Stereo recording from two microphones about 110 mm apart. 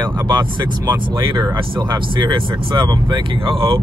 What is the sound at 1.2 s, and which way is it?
Speech, 45° right (ahead or behind).